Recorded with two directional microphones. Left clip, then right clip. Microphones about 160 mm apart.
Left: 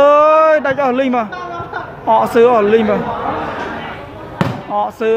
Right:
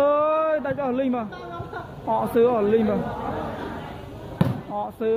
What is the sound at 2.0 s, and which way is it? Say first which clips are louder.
Speech: left 10 dB; 5° left (ahead or behind).